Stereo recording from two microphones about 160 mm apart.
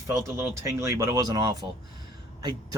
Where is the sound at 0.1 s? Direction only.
20° right (ahead or behind).